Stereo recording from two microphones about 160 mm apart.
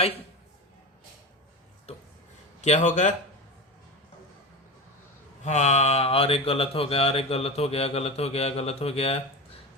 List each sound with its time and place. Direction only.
1.9 s a sound: 40° left (ahead or behind)
2.6 s speech: 45° left (ahead or behind)
5.5 s speech: 45° left (ahead or behind)